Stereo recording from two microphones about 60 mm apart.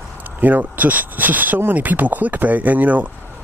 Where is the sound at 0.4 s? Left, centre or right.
Right.